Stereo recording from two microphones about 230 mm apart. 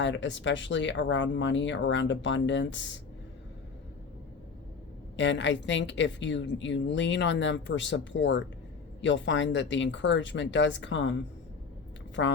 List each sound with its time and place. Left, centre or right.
0.0 s a woman's voice: left
5.1 s a woman's voice: left
12.2 s speech: left